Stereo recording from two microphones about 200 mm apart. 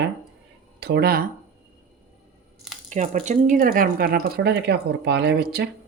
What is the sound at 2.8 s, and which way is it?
Speech, 35° right (ahead or behind).